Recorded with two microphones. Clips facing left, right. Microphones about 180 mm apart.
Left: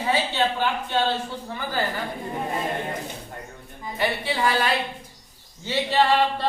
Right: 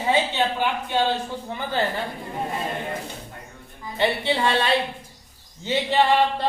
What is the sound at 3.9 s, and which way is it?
Speech, 25° right (ahead or behind).